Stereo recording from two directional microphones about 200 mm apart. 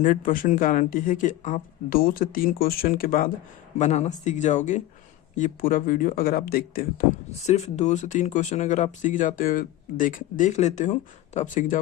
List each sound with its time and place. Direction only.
0.0 s speech: 40° left (ahead or behind)
3.8 s speech: 35° left (ahead or behind)
7.4 s speech: 35° left (ahead or behind)